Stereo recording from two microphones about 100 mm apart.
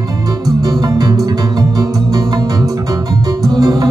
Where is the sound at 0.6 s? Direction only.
40° right (ahead or behind).